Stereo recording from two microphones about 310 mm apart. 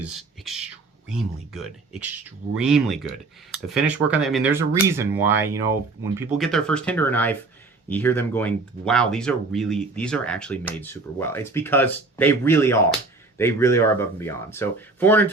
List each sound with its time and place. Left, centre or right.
0.0 s speech: centre